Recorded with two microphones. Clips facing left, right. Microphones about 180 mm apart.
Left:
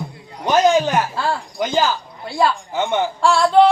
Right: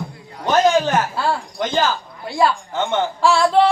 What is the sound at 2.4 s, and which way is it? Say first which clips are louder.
Speech: even; 10° left (ahead or behind).